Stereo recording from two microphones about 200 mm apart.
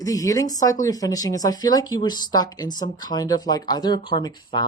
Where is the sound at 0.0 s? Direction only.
15° left (ahead or behind).